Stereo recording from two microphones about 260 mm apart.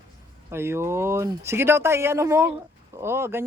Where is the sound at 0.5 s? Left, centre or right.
Centre.